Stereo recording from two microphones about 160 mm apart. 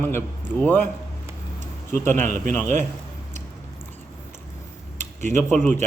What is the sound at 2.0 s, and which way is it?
Speech, 50° right (ahead or behind).